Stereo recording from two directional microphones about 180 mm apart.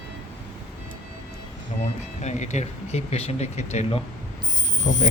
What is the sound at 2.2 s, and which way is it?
Speech, 40° left (ahead or behind).